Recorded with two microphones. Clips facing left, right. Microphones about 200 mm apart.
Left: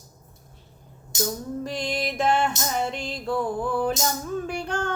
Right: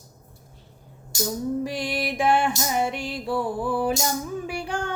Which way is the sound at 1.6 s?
10° right (ahead or behind).